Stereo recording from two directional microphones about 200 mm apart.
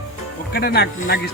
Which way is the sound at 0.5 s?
50° left (ahead or behind).